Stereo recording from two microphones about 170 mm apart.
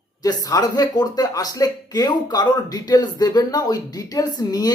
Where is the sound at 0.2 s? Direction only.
20° left (ahead or behind).